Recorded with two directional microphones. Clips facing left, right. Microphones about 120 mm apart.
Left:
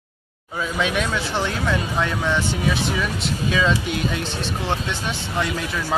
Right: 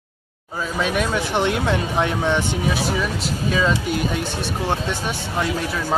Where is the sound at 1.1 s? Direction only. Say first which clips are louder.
Right 4 dB; 20° right (ahead or behind).